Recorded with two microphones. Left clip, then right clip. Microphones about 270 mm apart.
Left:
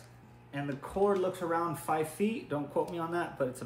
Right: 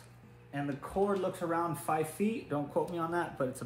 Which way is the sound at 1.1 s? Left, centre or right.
Centre.